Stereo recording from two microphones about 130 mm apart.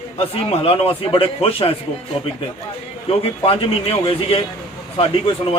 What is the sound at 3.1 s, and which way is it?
A man's voice, 45° left (ahead or behind).